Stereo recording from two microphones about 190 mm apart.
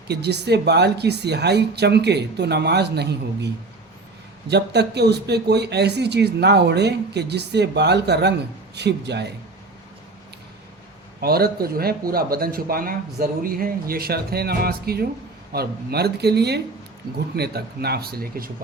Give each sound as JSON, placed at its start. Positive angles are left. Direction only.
{"t": 0.1, "sound": "speech", "side_deg": -60}
{"t": 11.2, "sound": "speech", "side_deg": -55}